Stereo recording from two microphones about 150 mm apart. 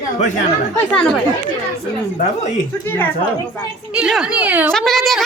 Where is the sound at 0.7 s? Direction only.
5° left (ahead or behind).